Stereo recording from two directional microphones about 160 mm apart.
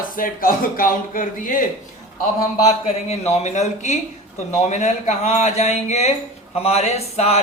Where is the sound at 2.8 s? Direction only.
40° left (ahead or behind).